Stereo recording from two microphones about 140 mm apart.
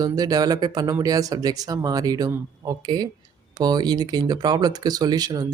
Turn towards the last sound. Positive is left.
turn(degrees=-30)  # may be behind; listen again after turning